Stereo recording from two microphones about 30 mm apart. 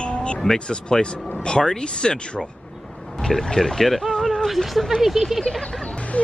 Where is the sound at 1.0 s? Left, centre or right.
Left.